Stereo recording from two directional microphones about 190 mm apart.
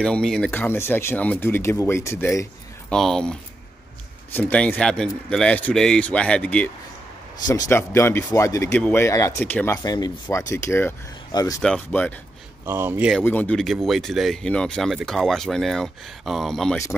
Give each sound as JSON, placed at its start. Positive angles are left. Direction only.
{"t": 0.0, "sound": "speech", "side_deg": 5}
{"t": 2.9, "sound": "speech", "side_deg": 5}
{"t": 7.4, "sound": "speech", "side_deg": 20}
{"t": 9.8, "sound": "speech", "side_deg": 20}
{"t": 11.6, "sound": "speech", "side_deg": 5}
{"t": 12.6, "sound": "speech", "side_deg": -15}
{"t": 13.2, "sound": "speech", "side_deg": 10}